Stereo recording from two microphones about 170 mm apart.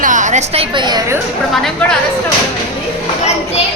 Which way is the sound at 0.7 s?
25° right (ahead or behind).